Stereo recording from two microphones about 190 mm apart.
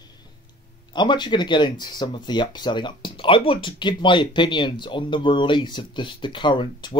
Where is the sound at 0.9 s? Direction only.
25° left (ahead or behind).